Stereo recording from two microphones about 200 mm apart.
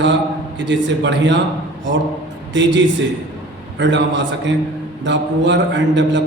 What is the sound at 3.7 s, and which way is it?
A man's voice, 65° right (ahead or behind).